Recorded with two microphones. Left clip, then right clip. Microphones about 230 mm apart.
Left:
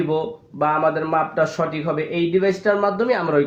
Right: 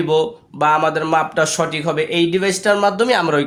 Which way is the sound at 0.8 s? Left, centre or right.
Right.